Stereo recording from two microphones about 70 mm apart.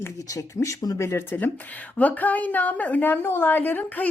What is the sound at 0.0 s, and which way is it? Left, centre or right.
Speech, left.